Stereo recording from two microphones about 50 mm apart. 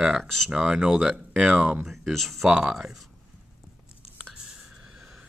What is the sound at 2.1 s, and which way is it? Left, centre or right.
Speech, centre.